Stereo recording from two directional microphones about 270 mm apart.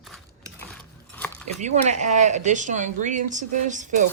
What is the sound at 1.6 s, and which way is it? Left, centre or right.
Speech, right.